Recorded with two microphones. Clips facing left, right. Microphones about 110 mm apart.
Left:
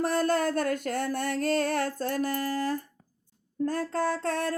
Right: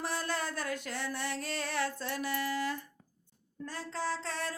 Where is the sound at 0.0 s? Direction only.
50° left (ahead or behind).